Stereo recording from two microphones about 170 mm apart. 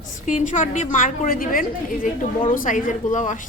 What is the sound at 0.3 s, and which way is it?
A woman's voice, 45° left (ahead or behind).